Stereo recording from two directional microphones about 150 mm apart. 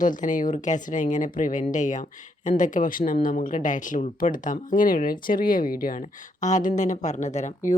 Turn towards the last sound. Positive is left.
turn(degrees=55)  # may be behind; listen again after turning